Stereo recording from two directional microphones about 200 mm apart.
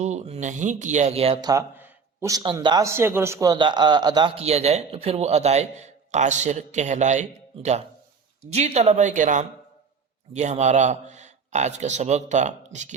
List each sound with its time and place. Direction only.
0.0 s a man's voice: 35° right (ahead or behind)